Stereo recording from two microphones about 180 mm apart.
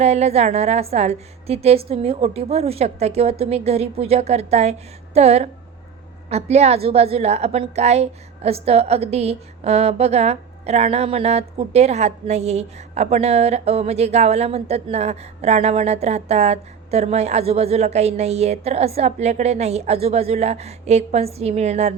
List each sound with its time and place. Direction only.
0.0 s a woman's voice: 35° right (ahead or behind)